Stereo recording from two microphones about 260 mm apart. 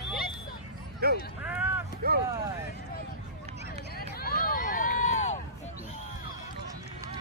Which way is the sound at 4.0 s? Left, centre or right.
Left.